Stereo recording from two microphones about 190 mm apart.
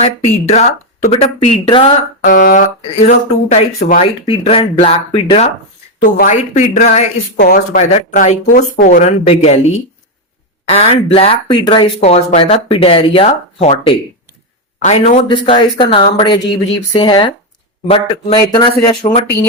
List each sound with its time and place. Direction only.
0.0 s speech: 35° left (ahead or behind)
2.2 s speech: 45° left (ahead or behind)
4.0 s speech: 30° left (ahead or behind)
6.0 s speech: 45° left (ahead or behind); by 19.1 s 20° left (ahead or behind)